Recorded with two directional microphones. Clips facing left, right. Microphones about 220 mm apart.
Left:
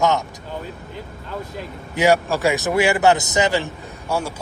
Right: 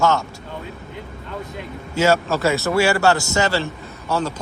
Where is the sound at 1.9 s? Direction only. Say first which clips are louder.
Left 1 dB; 15° left (ahead or behind).